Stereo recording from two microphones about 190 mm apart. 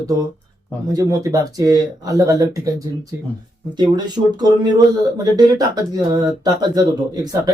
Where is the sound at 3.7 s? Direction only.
20° right (ahead or behind).